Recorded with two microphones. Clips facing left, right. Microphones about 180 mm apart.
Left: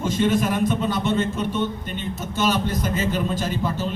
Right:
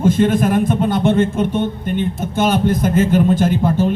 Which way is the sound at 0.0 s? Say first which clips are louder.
Right 6 dB; 55° right (ahead or behind).